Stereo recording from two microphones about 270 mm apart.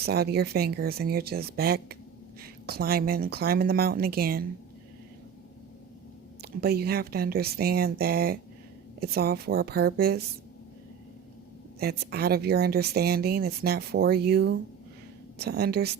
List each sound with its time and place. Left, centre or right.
0.0 s speech: right
6.4 s speech: right
11.8 s speech: right